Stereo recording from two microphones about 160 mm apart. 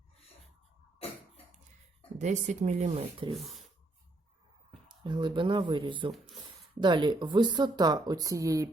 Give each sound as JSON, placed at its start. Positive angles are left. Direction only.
{"t": 2.1, "sound": "speech", "side_deg": -50}
{"t": 3.3, "sound": "speech", "side_deg": 0}
{"t": 4.9, "sound": "speech", "side_deg": -30}